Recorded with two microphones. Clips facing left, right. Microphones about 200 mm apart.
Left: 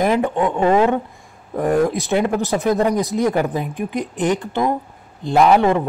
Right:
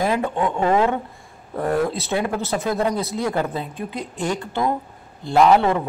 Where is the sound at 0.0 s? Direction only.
15° left (ahead or behind).